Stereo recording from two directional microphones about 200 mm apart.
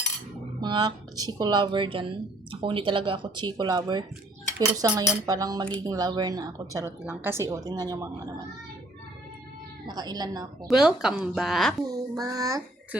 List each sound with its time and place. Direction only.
0.6 s speech: 20° right (ahead or behind)
9.8 s speech: 20° right (ahead or behind)
10.7 s speech: 5° right (ahead or behind)
11.9 s a child's voice: 20° right (ahead or behind)